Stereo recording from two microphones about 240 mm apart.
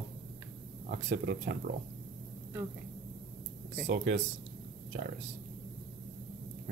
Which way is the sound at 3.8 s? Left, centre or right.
Right.